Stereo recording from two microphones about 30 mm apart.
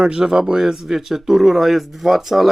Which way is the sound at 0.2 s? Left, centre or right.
Right.